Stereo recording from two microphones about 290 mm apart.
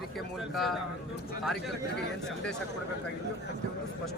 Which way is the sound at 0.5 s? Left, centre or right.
Centre.